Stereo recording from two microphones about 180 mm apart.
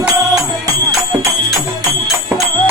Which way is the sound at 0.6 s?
15° right (ahead or behind).